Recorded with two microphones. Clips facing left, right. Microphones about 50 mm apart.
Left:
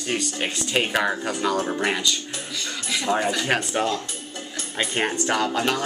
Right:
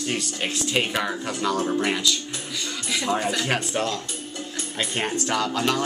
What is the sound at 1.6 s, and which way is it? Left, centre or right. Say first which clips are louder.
Speech: right 1 dB; centre.